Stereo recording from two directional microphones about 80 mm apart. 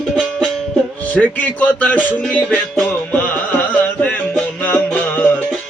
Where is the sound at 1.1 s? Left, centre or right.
Centre.